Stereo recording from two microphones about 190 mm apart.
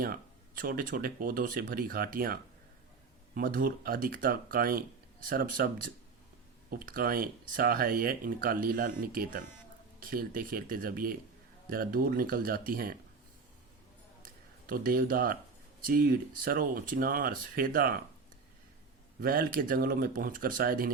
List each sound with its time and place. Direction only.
0.0 s speech: 50° right (ahead or behind)
14.7 s speech: 50° right (ahead or behind)
19.2 s speech: 50° right (ahead or behind)